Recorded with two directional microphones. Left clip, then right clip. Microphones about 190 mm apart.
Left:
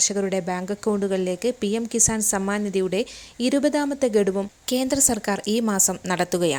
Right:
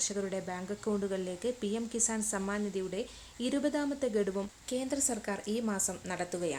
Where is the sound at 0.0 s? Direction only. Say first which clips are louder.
Left 12 dB; 35° left (ahead or behind).